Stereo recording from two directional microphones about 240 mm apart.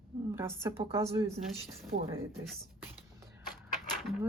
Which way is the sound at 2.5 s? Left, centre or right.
Centre.